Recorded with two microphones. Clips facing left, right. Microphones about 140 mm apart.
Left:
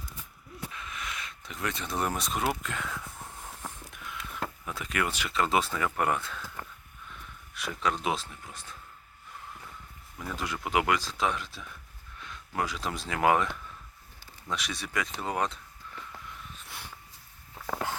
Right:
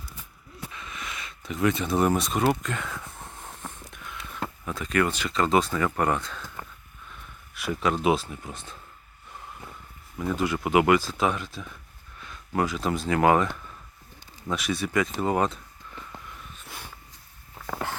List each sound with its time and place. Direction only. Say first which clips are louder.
0.7 s speech: right 3 dB; centre (ahead or behind)
3.4 s a sound: right 1 dB; 5° left (ahead or behind)
7.5 s speech: right 5 dB; 5° right (ahead or behind)
8.4 s speech: right 5 dB; 25° right (ahead or behind)
10.2 s speech: right 9 dB; 5° right (ahead or behind)